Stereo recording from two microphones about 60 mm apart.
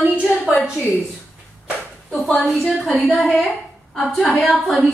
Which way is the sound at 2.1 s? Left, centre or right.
Centre.